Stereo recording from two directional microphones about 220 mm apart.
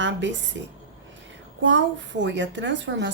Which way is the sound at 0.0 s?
55° right (ahead or behind).